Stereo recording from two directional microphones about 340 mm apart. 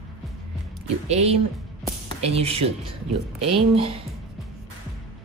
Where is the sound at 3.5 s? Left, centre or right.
Centre.